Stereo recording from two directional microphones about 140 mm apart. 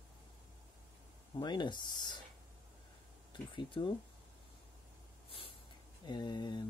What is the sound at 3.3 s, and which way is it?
Speech, 35° left (ahead or behind).